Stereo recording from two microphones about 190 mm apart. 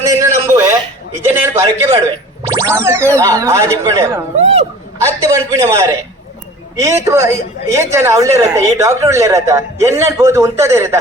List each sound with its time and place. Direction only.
0.0 s a sound: 15° right (ahead or behind)
1.2 s a man's voice: 10° right (ahead or behind)
1.6 s a man's voice: 25° right (ahead or behind)